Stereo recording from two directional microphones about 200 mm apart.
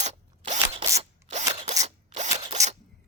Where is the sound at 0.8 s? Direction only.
15° right (ahead or behind).